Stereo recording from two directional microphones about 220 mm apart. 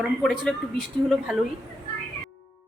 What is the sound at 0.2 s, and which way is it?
Speech, centre (ahead or behind).